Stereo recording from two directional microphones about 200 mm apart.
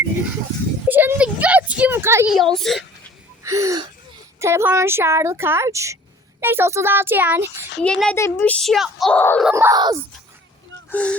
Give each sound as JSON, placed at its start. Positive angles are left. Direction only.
{"t": 0.9, "sound": "a sound", "side_deg": -10}
{"t": 2.3, "sound": "speech", "side_deg": 0}
{"t": 3.4, "sound": "gasp", "side_deg": -15}
{"t": 4.4, "sound": "speech", "side_deg": -15}
{"t": 7.8, "sound": "speech", "side_deg": 5}
{"t": 9.5, "sound": "speech", "side_deg": -15}
{"t": 10.8, "sound": "speech", "side_deg": 5}